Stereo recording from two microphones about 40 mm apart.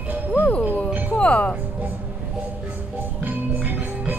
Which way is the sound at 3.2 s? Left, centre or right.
Right.